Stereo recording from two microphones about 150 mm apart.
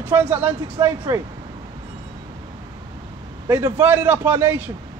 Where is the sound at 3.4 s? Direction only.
15° right (ahead or behind).